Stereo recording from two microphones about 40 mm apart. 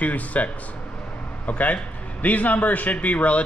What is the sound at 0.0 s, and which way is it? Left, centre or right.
Speech, left.